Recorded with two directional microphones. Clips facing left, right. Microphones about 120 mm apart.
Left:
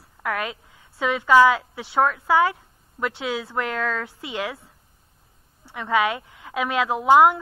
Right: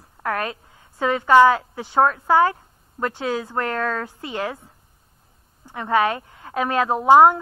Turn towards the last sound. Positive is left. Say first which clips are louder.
# right 3 dB
turn(degrees=-35)  # may be behind; listen again after turning